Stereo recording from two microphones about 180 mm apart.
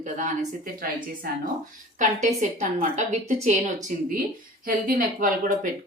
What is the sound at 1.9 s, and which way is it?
A woman's voice, 45° right (ahead or behind).